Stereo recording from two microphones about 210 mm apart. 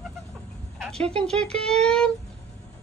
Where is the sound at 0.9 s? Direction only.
30° right (ahead or behind).